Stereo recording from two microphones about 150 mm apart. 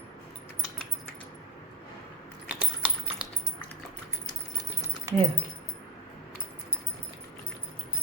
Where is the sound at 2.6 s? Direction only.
10° right (ahead or behind).